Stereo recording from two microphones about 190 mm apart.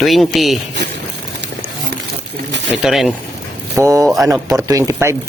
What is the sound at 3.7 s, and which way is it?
Speech, 15° right (ahead or behind).